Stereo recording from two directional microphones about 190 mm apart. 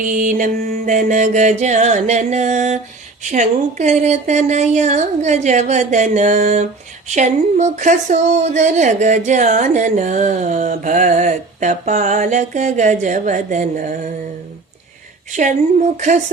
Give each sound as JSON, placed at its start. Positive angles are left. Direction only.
{"t": 0.0, "sound": "speech", "side_deg": -45}
{"t": 15.3, "sound": "speech", "side_deg": -40}